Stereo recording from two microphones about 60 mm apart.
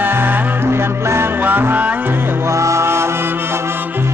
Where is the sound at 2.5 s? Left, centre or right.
Right.